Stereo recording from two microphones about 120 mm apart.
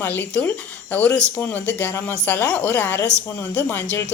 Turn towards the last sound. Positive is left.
turn(degrees=20)  # may be behind; listen again after turning